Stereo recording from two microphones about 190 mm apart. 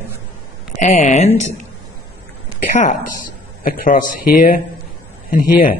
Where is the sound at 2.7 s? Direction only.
40° left (ahead or behind).